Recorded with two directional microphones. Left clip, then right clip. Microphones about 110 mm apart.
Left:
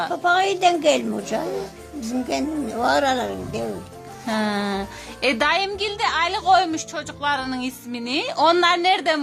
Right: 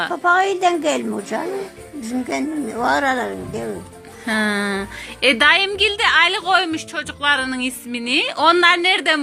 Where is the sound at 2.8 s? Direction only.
45° left (ahead or behind).